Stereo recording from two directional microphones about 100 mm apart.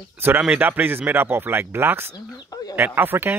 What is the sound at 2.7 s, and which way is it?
Speech, 20° right (ahead or behind).